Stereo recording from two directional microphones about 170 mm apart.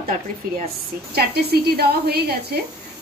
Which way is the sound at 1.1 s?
70° right (ahead or behind).